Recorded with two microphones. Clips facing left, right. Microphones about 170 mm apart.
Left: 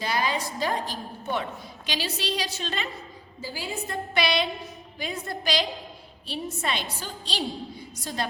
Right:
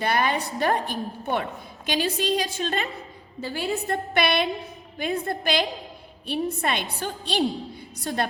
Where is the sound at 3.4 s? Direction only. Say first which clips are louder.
Right 6 dB; 65° right (ahead or behind).